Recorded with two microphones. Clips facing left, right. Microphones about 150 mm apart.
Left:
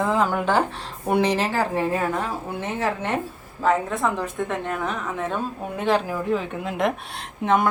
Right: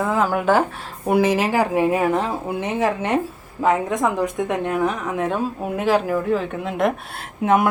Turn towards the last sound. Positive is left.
turn(degrees=-10)  # may be behind; listen again after turning